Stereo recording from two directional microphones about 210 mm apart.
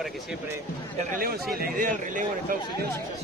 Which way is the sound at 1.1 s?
45° right (ahead or behind).